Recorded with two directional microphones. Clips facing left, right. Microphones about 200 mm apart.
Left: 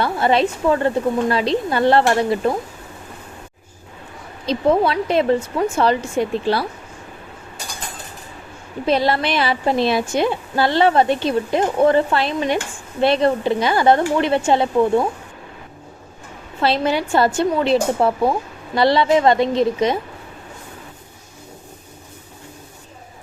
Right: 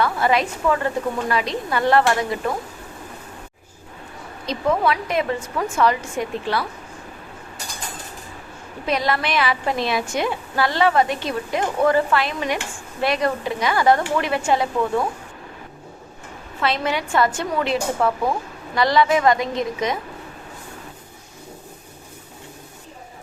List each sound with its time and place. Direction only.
0.0 s a woman's voice: 30° left (ahead or behind)
4.4 s speech: 30° left (ahead or behind)
8.9 s a woman's voice: 30° left (ahead or behind)
16.6 s a woman's voice: 30° left (ahead or behind)